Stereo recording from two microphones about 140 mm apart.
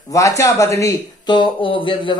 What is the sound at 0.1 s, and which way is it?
Speech, 25° left (ahead or behind).